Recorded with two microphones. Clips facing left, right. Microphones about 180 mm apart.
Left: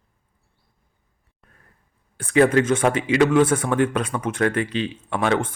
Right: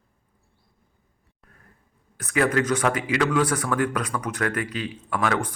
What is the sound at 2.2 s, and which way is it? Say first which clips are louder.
Speech: left 6 dB; 30° left (ahead or behind).